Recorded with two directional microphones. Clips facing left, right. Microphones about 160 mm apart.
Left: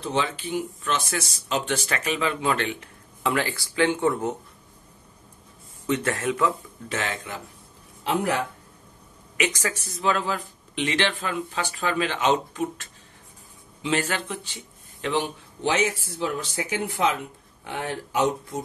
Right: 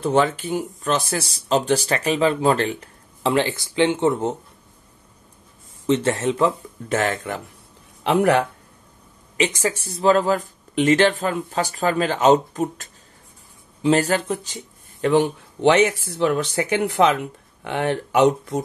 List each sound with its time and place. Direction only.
0.0 s speech: 50° right (ahead or behind); by 4.4 s 25° right (ahead or behind)
5.9 s speech: 25° right (ahead or behind)
6.9 s speech: 50° right (ahead or behind)
8.0 s speech: 70° right (ahead or behind)
9.4 s speech: 25° right (ahead or behind); by 15.2 s 45° right (ahead or behind)
15.6 s speech: 70° right (ahead or behind)